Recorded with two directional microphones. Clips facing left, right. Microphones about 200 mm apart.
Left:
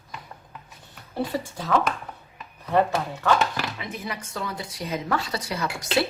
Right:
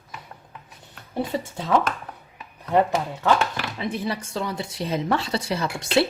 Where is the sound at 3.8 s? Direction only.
30° right (ahead or behind).